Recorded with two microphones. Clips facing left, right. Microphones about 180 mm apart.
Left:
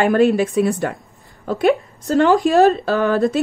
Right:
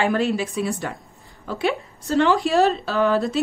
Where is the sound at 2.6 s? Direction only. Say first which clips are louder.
Left 5 dB; 50° left (ahead or behind).